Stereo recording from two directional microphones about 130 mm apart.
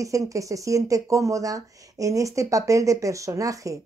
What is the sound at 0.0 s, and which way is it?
Speech, 25° right (ahead or behind).